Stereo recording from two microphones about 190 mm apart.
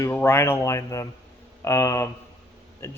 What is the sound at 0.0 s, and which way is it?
Speech, 15° left (ahead or behind).